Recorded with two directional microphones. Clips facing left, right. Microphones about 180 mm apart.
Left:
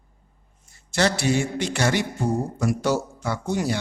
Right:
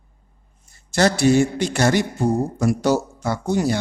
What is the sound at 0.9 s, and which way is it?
A man's voice, 40° right (ahead or behind).